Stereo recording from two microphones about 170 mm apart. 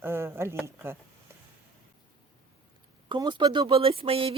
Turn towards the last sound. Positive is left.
turn(degrees=-35)  # may be behind; listen again after turning